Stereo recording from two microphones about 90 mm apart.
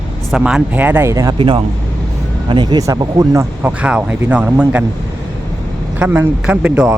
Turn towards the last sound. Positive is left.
turn(degrees=-10)  # may be behind; listen again after turning